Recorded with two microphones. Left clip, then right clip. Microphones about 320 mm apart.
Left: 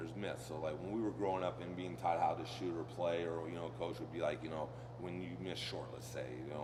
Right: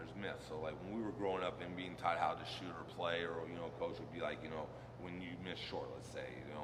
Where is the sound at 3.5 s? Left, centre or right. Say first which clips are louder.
Left 1 dB; centre.